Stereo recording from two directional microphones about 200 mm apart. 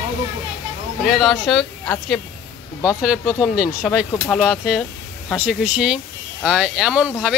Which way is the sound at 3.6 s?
5° right (ahead or behind).